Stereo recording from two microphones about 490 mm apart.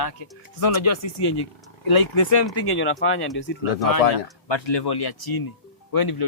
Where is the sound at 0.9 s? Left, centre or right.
Left.